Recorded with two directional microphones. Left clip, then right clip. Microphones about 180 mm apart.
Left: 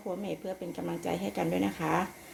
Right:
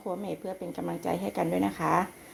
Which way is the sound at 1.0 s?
20° right (ahead or behind).